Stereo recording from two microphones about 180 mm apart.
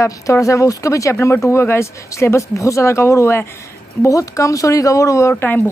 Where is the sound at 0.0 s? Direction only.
15° left (ahead or behind).